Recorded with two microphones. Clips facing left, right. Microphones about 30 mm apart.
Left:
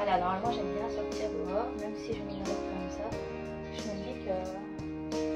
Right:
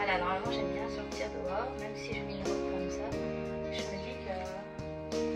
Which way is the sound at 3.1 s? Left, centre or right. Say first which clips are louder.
Right 1 dB; centre.